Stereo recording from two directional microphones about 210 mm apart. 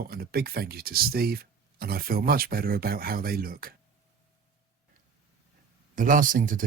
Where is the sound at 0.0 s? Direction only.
45° right (ahead or behind).